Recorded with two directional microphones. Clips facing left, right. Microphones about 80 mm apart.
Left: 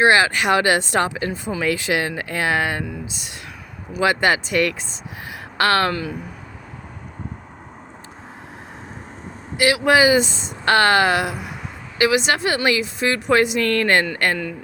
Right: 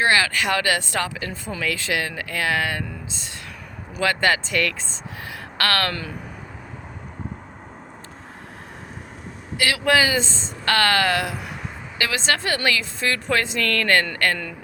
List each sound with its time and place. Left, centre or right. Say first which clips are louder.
0.0 s speech: left 4 dB; left
2.8 s a woman's voice: left 4 dB; centre
5.9 s speech: left 5 dB; centre
9.6 s a woman's voice: left 4 dB; centre